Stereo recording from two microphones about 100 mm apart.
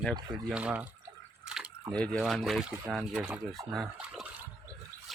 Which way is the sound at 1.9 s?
10° left (ahead or behind).